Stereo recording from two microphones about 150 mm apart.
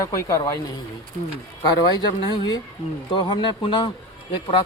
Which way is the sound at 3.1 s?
30° left (ahead or behind).